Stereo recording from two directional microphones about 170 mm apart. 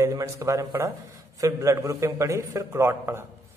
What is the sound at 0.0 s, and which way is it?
A man's voice, 20° right (ahead or behind).